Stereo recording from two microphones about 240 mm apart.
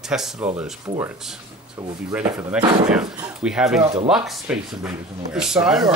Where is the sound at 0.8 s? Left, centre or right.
Centre.